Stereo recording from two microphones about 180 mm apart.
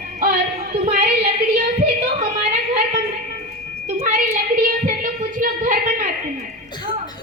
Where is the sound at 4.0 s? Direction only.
45° right (ahead or behind).